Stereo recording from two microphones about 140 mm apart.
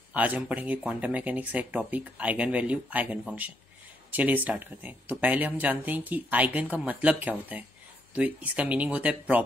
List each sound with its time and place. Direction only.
0.1 s speech: 10° right (ahead or behind)